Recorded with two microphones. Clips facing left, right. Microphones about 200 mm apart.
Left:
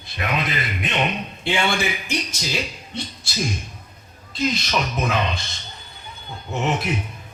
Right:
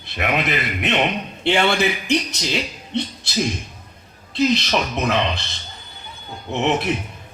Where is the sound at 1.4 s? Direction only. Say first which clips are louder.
Right 5 dB; 60° right (ahead or behind).